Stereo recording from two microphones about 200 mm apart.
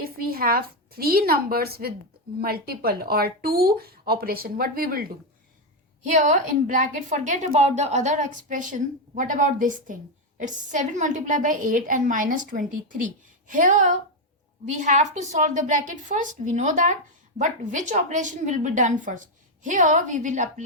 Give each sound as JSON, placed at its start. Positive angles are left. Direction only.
{"t": 0.0, "sound": "a woman's voice", "side_deg": -50}